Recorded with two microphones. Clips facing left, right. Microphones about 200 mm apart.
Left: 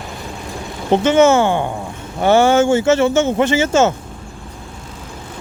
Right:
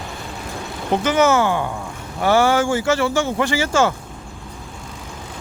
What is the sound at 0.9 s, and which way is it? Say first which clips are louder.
Speech: left 5 dB; 25° left (ahead or behind).